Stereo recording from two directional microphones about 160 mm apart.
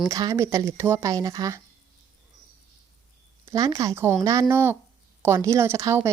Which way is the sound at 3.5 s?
20° right (ahead or behind).